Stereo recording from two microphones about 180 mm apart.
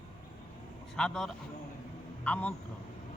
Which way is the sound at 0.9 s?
5° left (ahead or behind).